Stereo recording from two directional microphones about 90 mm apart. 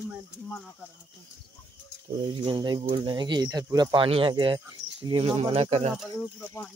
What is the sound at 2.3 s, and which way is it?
Speech, 55° right (ahead or behind).